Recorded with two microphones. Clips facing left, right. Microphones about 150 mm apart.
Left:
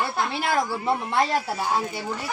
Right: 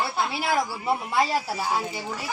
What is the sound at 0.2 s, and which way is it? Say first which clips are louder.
Speech: left 1 dB; 5° right (ahead or behind).